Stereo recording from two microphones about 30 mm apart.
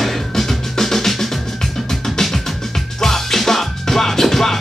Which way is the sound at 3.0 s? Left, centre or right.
Centre.